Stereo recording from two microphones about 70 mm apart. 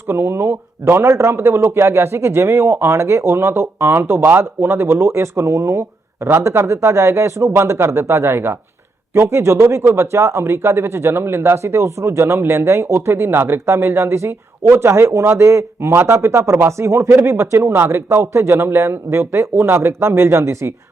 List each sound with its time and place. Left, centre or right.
0.1 s speech: right
6.2 s speech: right